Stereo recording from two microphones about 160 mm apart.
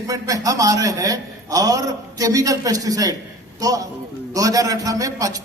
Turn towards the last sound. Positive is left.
turn(degrees=-20)  # may be behind; listen again after turning